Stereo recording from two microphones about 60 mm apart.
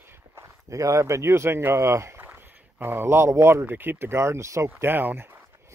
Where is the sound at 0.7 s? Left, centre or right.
Right.